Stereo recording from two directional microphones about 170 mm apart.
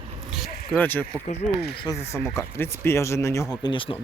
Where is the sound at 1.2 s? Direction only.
40° left (ahead or behind).